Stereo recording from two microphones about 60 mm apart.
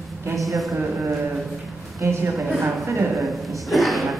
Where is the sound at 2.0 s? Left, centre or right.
Right.